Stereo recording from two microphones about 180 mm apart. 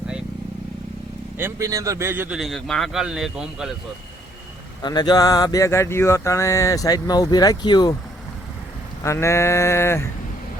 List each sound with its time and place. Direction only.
1.4 s speech: 15° right (ahead or behind)
4.8 s speech: 25° left (ahead or behind)
9.0 s a sound: 15° left (ahead or behind)